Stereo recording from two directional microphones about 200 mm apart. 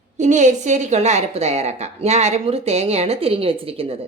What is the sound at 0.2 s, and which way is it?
A woman's voice, 35° right (ahead or behind).